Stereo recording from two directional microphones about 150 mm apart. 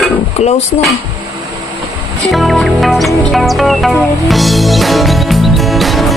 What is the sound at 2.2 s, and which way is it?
Music, centre (ahead or behind).